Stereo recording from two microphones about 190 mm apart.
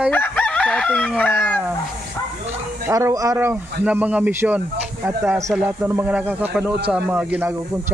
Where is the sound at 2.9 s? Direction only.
15° right (ahead or behind).